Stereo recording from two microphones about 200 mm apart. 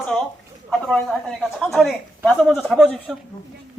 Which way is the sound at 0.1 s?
Centre (ahead or behind).